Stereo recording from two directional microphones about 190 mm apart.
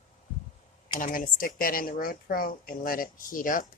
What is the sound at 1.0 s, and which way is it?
Speech, 45° left (ahead or behind).